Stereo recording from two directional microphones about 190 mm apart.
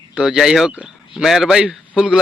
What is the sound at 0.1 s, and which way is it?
Speech, 5° right (ahead or behind).